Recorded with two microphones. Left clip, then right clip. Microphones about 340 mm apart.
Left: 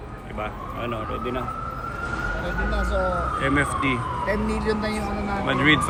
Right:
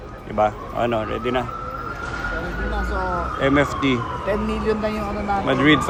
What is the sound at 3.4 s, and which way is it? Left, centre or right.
Speech, centre.